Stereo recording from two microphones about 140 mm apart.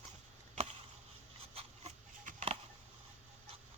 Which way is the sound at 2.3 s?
60° right (ahead or behind).